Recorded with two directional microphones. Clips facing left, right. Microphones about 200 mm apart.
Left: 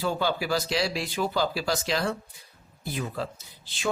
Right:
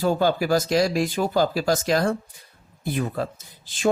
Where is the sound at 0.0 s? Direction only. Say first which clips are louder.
Right 6 dB; 45° right (ahead or behind).